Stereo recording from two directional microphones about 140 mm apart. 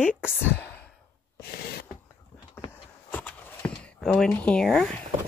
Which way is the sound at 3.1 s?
10° left (ahead or behind).